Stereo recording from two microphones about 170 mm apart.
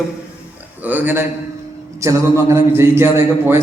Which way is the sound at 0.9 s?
10° right (ahead or behind).